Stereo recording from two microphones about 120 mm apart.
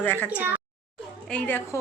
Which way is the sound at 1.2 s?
10° left (ahead or behind).